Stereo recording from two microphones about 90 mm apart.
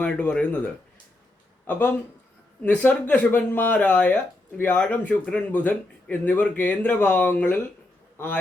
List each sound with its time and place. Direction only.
0.0 s speech: 15° left (ahead or behind)